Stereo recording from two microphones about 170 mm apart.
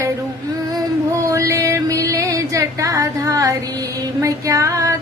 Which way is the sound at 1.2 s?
20° right (ahead or behind).